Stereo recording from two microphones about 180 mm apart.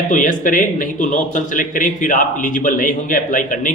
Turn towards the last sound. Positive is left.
turn(degrees=50)  # may be behind; listen again after turning